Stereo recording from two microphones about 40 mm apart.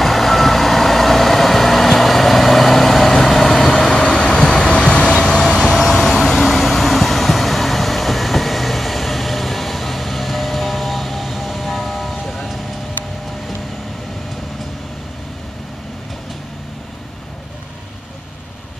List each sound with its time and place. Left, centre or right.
0.0 s vehicle: centre
4.7 s vehicle: left
6.3 s vehicle: centre